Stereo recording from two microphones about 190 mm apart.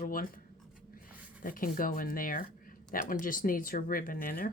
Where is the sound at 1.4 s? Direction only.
45° left (ahead or behind).